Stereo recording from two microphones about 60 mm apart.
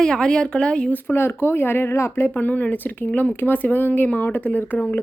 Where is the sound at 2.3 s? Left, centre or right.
Left.